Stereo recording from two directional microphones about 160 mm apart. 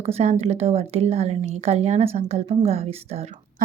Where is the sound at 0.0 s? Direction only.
40° right (ahead or behind).